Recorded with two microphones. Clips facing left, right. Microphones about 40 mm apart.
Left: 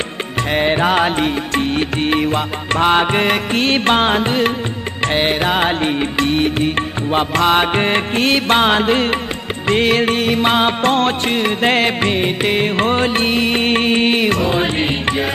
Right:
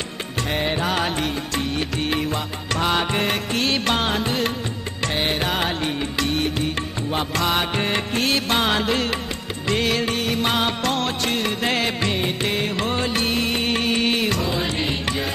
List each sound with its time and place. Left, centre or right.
0.5 s music: left